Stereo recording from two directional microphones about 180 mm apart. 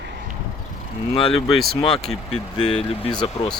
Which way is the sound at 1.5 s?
Centre (ahead or behind).